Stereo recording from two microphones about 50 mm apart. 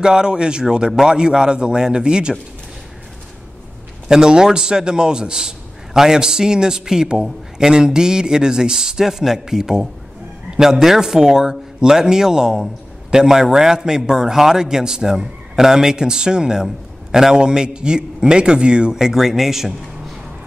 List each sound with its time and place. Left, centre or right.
0.0 s a man's voice: centre
4.1 s a man's voice: centre